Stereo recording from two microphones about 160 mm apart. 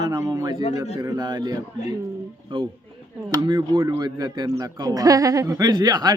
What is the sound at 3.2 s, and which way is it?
Speech, 25° right (ahead or behind).